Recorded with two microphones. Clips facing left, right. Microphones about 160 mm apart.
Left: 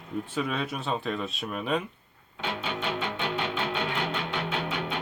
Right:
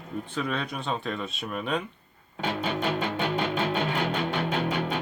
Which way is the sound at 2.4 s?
45° right (ahead or behind).